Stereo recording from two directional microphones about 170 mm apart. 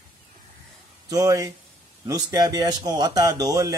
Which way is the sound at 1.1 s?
20° right (ahead or behind).